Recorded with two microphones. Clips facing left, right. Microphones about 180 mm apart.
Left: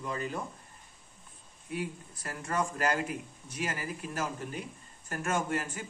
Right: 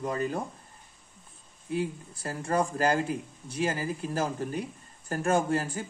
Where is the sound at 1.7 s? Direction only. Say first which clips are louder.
Right 6 dB; 30° right (ahead or behind).